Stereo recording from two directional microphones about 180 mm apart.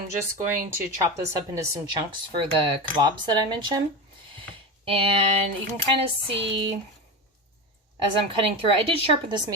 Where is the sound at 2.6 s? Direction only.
25° right (ahead or behind).